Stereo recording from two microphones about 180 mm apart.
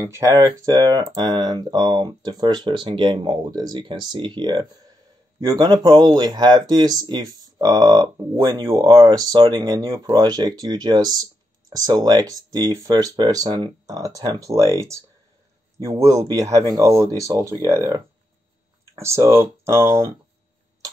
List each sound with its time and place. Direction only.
0.0 s speech: 15° right (ahead or behind)